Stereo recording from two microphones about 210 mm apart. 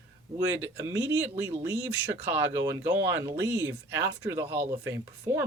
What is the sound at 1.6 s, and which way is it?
Speech, 10° right (ahead or behind).